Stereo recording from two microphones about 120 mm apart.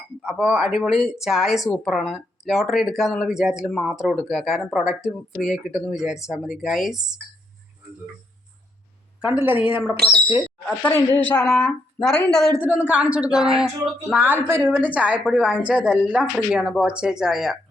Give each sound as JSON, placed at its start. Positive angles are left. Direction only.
{"t": 0.2, "sound": "speech", "side_deg": -10}
{"t": 9.2, "sound": "speech", "side_deg": -15}
{"t": 10.8, "sound": "a woman's voice", "side_deg": 15}
{"t": 11.4, "sound": "speech", "side_deg": 0}
{"t": 12.5, "sound": "speech", "side_deg": -15}
{"t": 14.4, "sound": "speech", "side_deg": -20}